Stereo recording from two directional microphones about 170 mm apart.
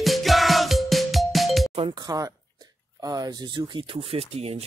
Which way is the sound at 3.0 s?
20° right (ahead or behind).